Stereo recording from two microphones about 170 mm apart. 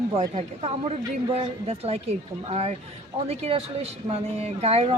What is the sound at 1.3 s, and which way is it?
Speech, 35° right (ahead or behind).